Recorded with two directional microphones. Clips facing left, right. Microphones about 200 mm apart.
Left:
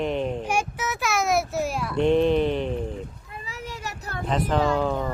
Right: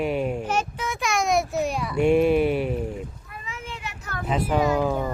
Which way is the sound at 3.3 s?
35° left (ahead or behind).